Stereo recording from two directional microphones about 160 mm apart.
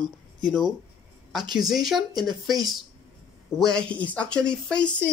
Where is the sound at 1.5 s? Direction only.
Centre (ahead or behind).